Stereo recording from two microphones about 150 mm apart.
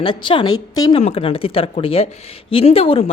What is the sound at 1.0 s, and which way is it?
A woman's voice, 40° left (ahead or behind).